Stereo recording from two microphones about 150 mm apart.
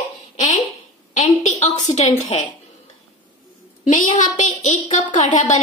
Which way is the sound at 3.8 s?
60° left (ahead or behind).